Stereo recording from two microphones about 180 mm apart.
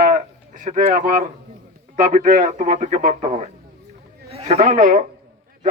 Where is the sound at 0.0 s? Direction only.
50° right (ahead or behind).